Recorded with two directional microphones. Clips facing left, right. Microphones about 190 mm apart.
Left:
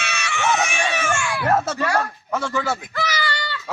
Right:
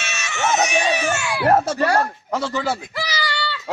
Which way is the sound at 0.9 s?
20° right (ahead or behind).